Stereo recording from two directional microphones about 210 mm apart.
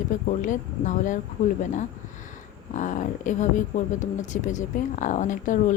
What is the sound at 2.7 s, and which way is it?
A woman's voice, 35° left (ahead or behind).